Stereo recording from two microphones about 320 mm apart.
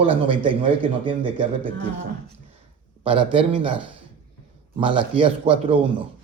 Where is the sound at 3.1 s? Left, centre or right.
Centre.